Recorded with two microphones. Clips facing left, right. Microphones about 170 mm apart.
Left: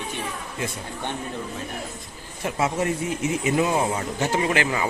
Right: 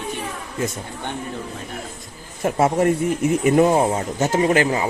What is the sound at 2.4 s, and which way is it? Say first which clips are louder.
Speech: right 7 dB; 50° right (ahead or behind).